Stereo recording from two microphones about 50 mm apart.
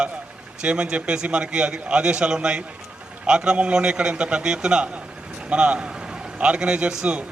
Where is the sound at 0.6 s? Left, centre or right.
Right.